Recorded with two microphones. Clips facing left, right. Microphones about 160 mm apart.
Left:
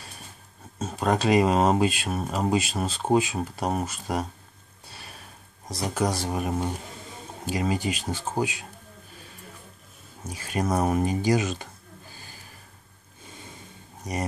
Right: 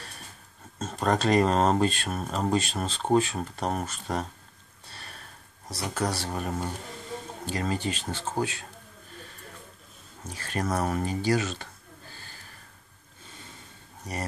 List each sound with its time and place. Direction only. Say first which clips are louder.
0.7 s speech: left 1 dB; 5° left (ahead or behind)
4.8 s sniff: left 1 dB; 10° left (ahead or behind)
5.7 s speech: left 3 dB; 15° left (ahead or behind)
10.2 s speech: left 3 dB; 10° left (ahead or behind)
14.0 s speech: left 4 dB; 15° left (ahead or behind)